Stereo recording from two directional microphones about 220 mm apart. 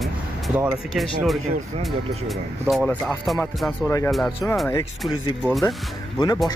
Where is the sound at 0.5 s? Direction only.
5° right (ahead or behind).